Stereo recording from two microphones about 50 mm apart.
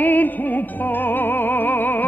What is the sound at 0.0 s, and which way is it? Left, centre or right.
Music, left.